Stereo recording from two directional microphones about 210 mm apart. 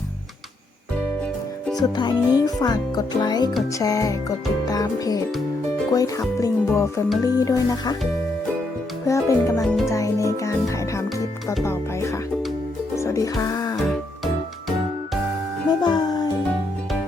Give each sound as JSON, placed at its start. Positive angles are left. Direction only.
{"t": 1.7, "sound": "speech", "side_deg": 20}
{"t": 9.0, "sound": "speech", "side_deg": 15}
{"t": 13.0, "sound": "music", "side_deg": 15}
{"t": 15.8, "sound": "music", "side_deg": 20}